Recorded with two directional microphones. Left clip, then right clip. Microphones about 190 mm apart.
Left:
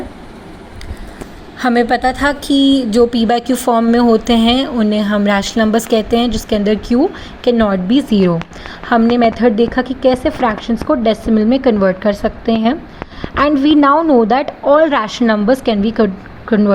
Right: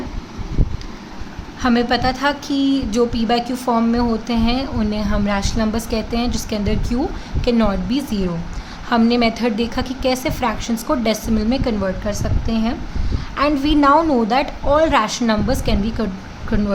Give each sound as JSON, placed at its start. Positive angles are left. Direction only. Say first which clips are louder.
{"t": 1.6, "sound": "speech", "louder": "left 5 dB", "side_deg": 25}
{"t": 9.0, "sound": "speech", "louder": "left 6 dB", "side_deg": 20}